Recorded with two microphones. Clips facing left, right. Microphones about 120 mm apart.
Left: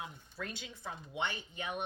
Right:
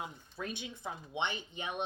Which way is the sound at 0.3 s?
15° right (ahead or behind).